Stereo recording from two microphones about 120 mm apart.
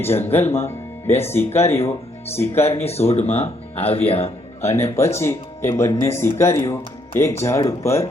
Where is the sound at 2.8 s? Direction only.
60° left (ahead or behind).